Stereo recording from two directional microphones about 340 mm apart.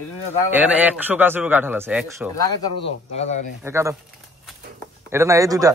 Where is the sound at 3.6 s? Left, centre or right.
Centre.